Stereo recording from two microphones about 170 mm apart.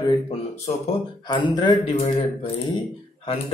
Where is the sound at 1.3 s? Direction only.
25° left (ahead or behind).